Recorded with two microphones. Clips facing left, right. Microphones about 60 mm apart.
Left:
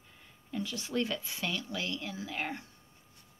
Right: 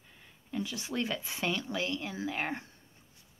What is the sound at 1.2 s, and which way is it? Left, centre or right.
A woman's voice, right.